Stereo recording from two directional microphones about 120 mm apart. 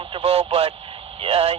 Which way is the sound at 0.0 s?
50° right (ahead or behind).